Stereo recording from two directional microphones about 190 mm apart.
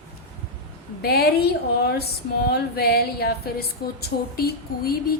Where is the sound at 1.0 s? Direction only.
55° left (ahead or behind).